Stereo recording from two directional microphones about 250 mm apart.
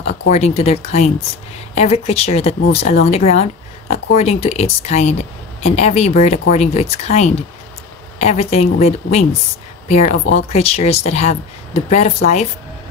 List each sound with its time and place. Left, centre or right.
0.3 s speech: left